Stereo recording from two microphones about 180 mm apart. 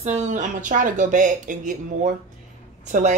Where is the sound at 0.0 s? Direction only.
40° right (ahead or behind).